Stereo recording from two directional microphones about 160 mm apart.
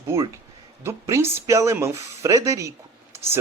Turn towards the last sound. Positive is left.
turn(degrees=-20)  # may be behind; listen again after turning